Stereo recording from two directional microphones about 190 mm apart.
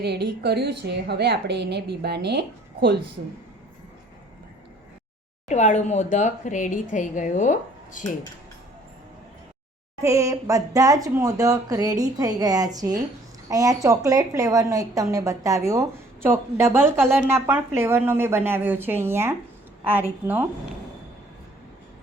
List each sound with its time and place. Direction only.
0.0 s a woman's voice: 60° right (ahead or behind)
5.5 s speech: 40° left (ahead or behind)
10.0 s a woman's voice: 15° right (ahead or behind)